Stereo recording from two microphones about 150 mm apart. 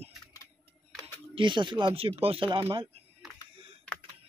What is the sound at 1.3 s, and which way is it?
Speech, 30° right (ahead or behind).